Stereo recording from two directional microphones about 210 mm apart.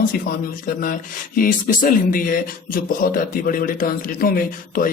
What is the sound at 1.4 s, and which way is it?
A man's voice, 40° left (ahead or behind).